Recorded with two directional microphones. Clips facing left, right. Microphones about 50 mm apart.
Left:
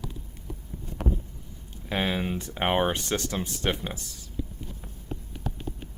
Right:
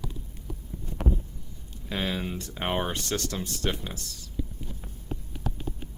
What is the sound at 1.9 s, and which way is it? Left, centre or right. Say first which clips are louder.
Speech: left 3 dB; left.